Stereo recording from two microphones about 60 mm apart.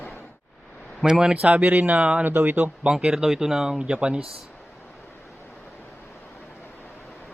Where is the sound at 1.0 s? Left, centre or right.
Centre.